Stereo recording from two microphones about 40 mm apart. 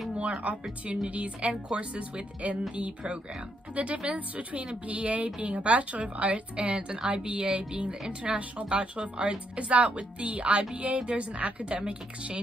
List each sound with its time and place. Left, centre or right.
0.2 s a woman's voice: right